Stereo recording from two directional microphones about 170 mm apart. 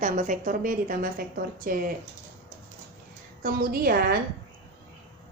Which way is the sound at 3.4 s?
60° right (ahead or behind).